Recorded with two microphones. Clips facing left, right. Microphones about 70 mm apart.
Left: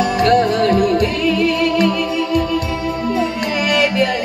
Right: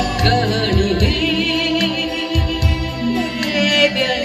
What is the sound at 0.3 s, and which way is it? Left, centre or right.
Music, left.